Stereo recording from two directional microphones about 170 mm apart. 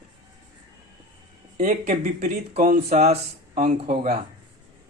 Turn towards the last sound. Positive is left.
turn(degrees=-40)  # may be behind; listen again after turning